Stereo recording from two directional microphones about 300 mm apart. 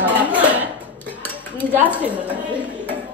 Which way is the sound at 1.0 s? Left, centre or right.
Centre.